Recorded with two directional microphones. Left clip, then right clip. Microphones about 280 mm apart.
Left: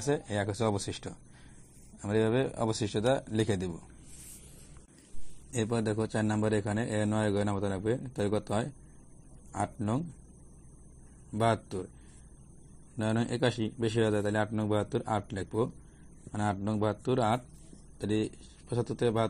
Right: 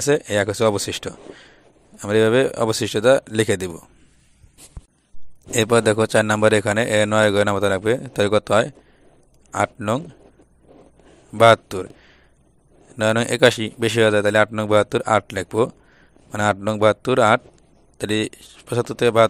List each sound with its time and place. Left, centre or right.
0.1 s speech: right
0.5 s a man's voice: right
5.5 s a man's voice: right
11.3 s a man's voice: right
12.9 s a man's voice: right